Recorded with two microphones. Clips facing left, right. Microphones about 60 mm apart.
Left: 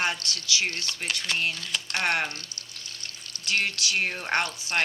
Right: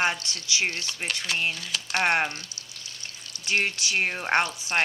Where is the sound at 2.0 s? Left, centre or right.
Right.